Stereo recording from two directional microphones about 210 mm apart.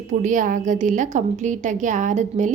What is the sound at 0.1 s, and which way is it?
A woman's voice, 35° right (ahead or behind).